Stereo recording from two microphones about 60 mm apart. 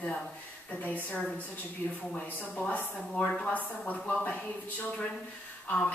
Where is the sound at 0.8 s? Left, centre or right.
Left.